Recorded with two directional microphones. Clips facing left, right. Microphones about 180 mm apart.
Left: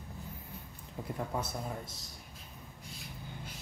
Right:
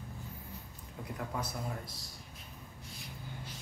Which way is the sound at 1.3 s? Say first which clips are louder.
Left 2 dB; 25° left (ahead or behind).